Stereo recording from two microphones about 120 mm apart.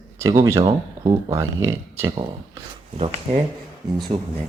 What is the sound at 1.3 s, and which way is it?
Speech, 25° right (ahead or behind).